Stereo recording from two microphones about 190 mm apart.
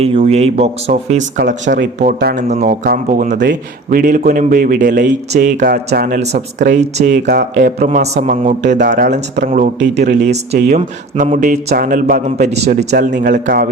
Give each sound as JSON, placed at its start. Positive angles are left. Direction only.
{"t": 0.0, "sound": "speech", "side_deg": -30}
{"t": 2.3, "sound": "speech", "side_deg": -45}
{"t": 12.9, "sound": "speech", "side_deg": -60}
{"t": 13.2, "sound": "speech", "side_deg": -50}